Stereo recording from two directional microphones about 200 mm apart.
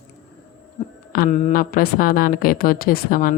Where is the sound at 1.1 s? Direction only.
45° left (ahead or behind).